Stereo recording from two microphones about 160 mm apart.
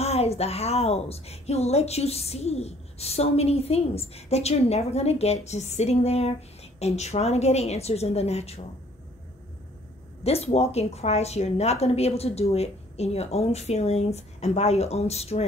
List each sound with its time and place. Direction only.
0.0 s a woman's voice: 40° left (ahead or behind)
10.2 s a woman's voice: 40° left (ahead or behind)